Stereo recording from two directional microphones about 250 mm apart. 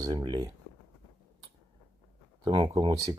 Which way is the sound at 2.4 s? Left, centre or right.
Centre.